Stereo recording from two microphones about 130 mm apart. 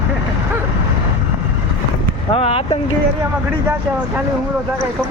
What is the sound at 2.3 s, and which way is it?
Speech, 50° left (ahead or behind).